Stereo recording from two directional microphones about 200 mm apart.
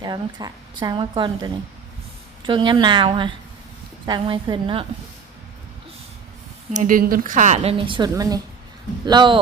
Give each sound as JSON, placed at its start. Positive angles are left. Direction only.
{"t": 0.0, "sound": "a woman's voice", "side_deg": -20}
{"t": 6.7, "sound": "a woman's voice", "side_deg": -45}